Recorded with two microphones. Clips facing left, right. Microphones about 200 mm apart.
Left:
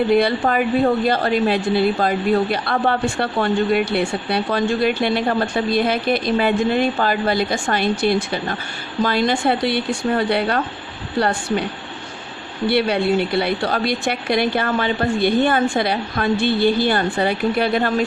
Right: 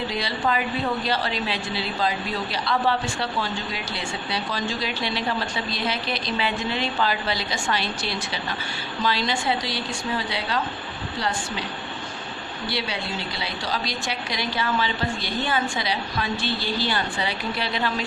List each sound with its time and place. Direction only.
0.1 s a woman's voice: 55° left (ahead or behind)
12.6 s a woman's voice: 60° left (ahead or behind)